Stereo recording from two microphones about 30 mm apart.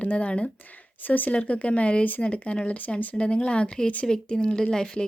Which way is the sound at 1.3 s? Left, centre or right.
Left.